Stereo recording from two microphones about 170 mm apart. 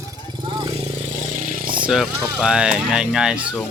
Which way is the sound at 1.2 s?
50° right (ahead or behind).